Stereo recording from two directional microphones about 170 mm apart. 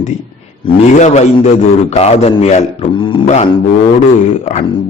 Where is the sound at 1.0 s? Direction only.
40° left (ahead or behind).